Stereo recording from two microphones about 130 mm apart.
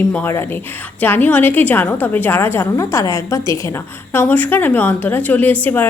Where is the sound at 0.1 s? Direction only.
15° left (ahead or behind).